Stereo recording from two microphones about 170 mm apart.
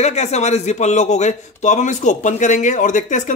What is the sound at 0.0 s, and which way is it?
A man's voice, 40° left (ahead or behind).